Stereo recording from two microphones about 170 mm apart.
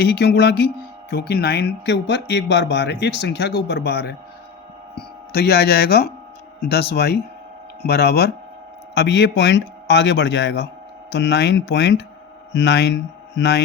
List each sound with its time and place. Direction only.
0.0 s speech: 75° left (ahead or behind)
9.0 s a man's voice: 90° left